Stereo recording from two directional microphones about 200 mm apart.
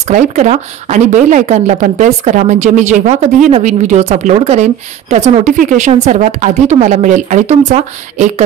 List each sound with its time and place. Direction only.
0.0 s speech: 35° right (ahead or behind)